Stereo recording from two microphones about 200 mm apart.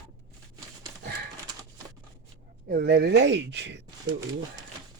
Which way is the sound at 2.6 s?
50° right (ahead or behind).